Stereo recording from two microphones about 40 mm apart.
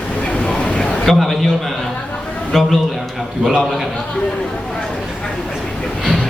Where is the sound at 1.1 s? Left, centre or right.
Centre.